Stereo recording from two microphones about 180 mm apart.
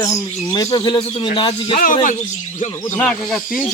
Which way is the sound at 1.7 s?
50° left (ahead or behind).